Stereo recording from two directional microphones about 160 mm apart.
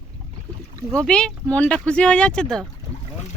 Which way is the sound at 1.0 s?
5° left (ahead or behind).